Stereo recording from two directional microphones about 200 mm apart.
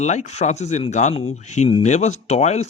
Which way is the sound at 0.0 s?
35° left (ahead or behind).